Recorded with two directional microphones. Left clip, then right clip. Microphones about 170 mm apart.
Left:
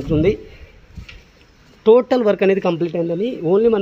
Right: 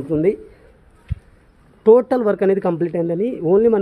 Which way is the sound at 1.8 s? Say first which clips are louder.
Even; 15° right (ahead or behind).